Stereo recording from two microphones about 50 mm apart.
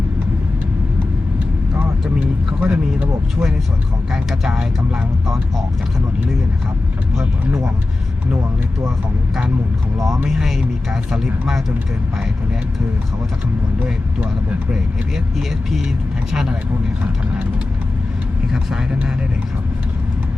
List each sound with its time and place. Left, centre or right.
1.7 s vehicle: right
2.6 s speech: right
4.1 s speech: centre
10.2 s speech: centre
16.3 s speech: centre
18.5 s speech: centre